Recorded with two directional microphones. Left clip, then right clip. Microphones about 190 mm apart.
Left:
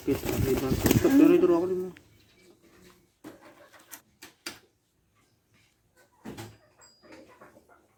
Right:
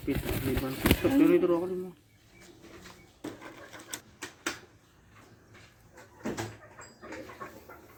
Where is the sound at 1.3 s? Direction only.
35° right (ahead or behind).